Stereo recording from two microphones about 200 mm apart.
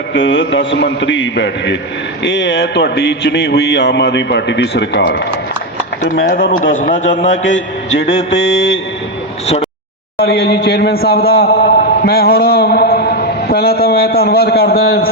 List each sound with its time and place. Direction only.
0.1 s a man's voice: 60° left (ahead or behind)
6.7 s a man's voice: 40° left (ahead or behind)
7.9 s a man's voice: 60° left (ahead or behind)
10.2 s a man's voice: 50° left (ahead or behind)